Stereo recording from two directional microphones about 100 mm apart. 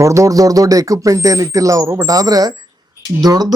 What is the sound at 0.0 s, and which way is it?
Speech, 30° right (ahead or behind).